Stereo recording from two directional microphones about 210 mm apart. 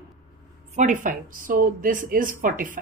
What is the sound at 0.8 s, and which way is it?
Speech, 40° right (ahead or behind).